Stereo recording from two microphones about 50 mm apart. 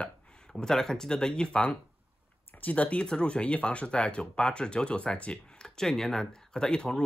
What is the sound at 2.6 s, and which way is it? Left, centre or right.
Speech, left.